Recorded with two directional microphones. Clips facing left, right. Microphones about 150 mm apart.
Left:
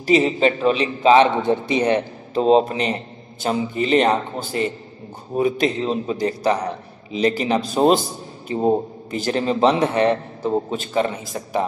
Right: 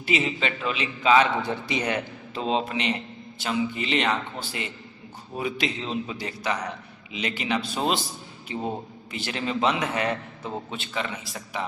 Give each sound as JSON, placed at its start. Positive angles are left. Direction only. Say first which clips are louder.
{"t": 0.0, "sound": "a man's voice", "louder": "left 10 dB", "side_deg": 40}